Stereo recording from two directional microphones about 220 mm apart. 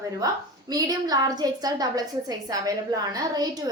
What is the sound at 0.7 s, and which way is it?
A woman's voice, 15° right (ahead or behind).